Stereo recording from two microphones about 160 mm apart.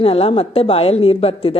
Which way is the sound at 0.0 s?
35° left (ahead or behind).